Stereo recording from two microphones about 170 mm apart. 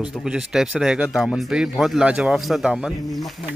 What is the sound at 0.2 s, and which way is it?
Speech, 5° right (ahead or behind).